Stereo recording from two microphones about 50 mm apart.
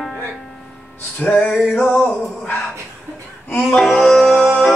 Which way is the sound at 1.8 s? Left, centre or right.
Left.